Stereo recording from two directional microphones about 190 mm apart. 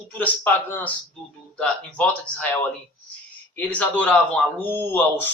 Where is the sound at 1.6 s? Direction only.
5° left (ahead or behind).